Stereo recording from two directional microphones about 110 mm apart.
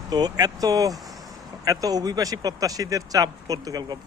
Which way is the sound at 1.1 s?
Centre (ahead or behind).